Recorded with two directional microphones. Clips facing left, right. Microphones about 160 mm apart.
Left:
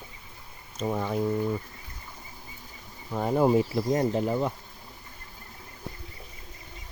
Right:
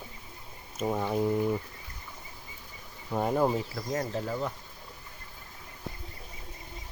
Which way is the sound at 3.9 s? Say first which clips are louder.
Left 3 dB; 20° left (ahead or behind).